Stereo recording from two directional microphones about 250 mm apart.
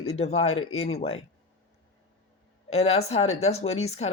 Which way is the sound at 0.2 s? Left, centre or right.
Left.